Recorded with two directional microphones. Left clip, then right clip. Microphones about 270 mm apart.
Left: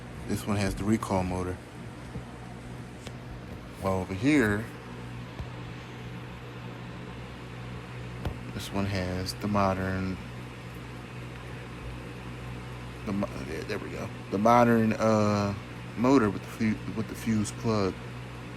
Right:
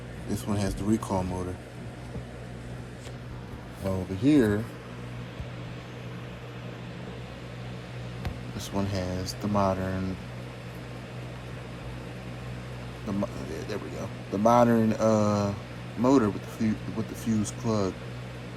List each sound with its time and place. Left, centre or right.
0.3 s speech: centre
3.9 s speech: centre
8.5 s speech: centre
9.7 s speech: centre
13.1 s speech: centre